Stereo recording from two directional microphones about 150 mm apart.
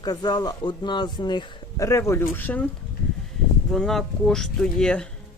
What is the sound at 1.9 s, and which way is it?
Speech, 20° left (ahead or behind).